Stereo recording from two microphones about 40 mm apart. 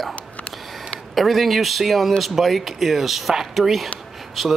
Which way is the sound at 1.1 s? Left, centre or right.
Centre.